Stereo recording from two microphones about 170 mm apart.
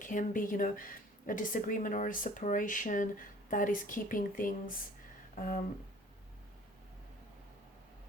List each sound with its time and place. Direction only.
0.0 s speech: 50° left (ahead or behind)